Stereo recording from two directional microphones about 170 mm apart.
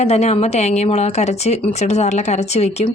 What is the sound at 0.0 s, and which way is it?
A woman's voice, 40° left (ahead or behind).